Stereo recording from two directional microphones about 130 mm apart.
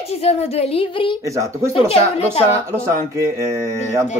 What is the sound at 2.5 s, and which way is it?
Speech, 25° right (ahead or behind).